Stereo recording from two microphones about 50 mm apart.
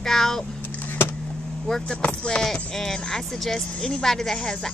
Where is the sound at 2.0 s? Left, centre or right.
Left.